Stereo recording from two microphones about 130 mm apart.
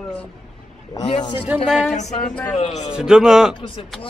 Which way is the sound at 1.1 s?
40° left (ahead or behind).